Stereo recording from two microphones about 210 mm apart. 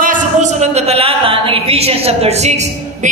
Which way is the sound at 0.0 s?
40° right (ahead or behind).